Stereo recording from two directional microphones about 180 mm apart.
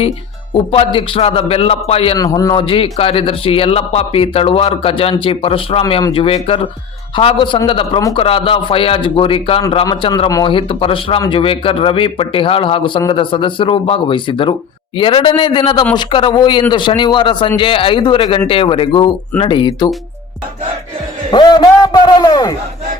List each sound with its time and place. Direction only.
0.5 s a man's voice: 30° left (ahead or behind)
2.1 s a man's voice: 20° left (ahead or behind)
21.2 s a man's voice: 25° left (ahead or behind)